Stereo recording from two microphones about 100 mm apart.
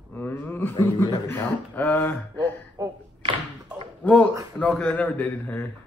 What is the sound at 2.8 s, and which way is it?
Speech, 35° right (ahead or behind).